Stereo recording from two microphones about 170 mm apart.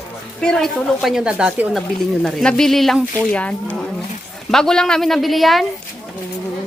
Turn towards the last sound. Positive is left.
turn(degrees=0)  # may be behind; listen again after turning